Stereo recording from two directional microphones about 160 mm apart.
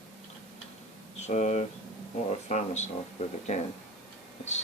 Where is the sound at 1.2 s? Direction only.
45° left (ahead or behind).